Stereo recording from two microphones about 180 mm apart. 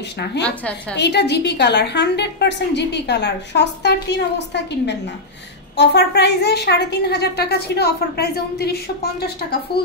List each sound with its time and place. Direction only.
0.2 s a woman's voice: 70° left (ahead or behind)